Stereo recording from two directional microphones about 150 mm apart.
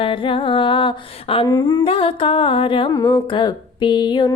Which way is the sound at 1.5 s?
25° left (ahead or behind).